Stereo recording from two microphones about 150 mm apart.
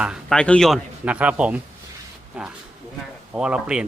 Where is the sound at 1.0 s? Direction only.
10° right (ahead or behind).